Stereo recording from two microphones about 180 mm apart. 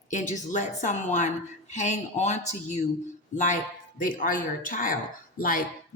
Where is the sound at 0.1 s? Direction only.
45° left (ahead or behind).